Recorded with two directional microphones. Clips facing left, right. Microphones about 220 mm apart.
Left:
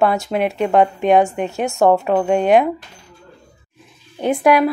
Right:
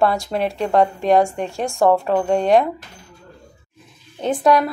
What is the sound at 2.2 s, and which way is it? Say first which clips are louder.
Speech: left 2 dB; 5° left (ahead or behind).